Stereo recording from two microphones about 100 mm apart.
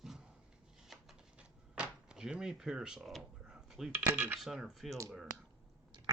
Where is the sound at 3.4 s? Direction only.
5° right (ahead or behind).